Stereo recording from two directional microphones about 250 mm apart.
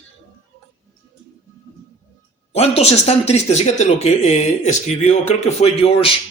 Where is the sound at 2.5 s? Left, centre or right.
Left.